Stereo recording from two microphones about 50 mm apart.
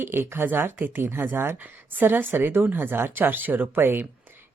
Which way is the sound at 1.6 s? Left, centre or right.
Right.